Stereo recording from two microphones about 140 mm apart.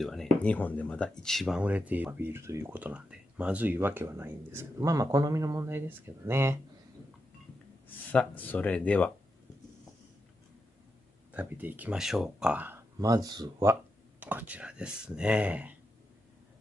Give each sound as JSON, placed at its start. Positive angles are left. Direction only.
{"t": 0.0, "sound": "speech", "side_deg": 0}
{"t": 8.1, "sound": "speech", "side_deg": 10}
{"t": 11.3, "sound": "speech", "side_deg": -15}
{"t": 13.0, "sound": "speech", "side_deg": -25}
{"t": 14.2, "sound": "speech", "side_deg": -10}